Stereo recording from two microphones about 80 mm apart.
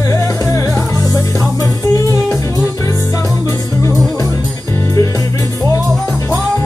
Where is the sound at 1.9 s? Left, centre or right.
Left.